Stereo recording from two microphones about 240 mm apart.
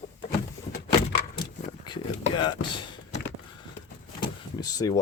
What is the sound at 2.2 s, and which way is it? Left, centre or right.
Speech, centre.